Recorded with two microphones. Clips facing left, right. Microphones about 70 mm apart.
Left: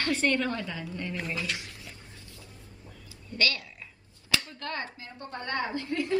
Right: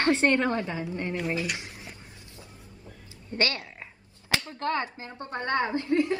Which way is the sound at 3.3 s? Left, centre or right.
Right.